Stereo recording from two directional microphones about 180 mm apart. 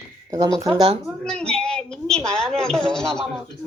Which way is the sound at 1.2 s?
5° left (ahead or behind).